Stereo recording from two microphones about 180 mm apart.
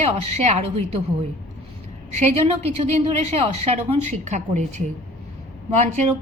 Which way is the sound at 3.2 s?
35° right (ahead or behind).